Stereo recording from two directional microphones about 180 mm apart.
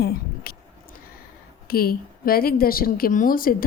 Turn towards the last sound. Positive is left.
turn(degrees=55)  # may be behind; listen again after turning